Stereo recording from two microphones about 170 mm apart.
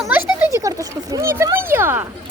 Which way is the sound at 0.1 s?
10° right (ahead or behind).